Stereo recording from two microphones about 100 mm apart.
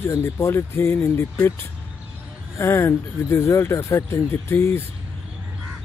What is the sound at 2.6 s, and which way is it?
Speech, 25° left (ahead or behind).